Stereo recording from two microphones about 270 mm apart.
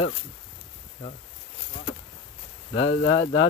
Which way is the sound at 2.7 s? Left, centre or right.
Left.